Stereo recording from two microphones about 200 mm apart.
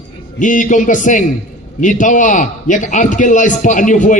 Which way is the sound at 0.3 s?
40° left (ahead or behind).